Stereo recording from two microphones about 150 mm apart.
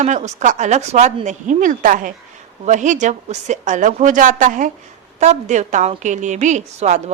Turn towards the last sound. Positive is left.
turn(degrees=-50)  # may be behind; listen again after turning